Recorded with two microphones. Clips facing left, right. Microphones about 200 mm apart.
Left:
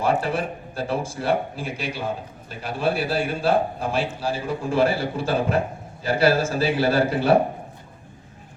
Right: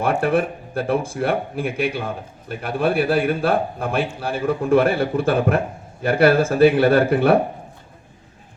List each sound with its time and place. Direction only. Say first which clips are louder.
0.0 s speech: right 4 dB; 55° right (ahead or behind)